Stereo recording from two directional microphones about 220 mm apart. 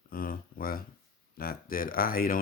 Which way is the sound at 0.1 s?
40° left (ahead or behind).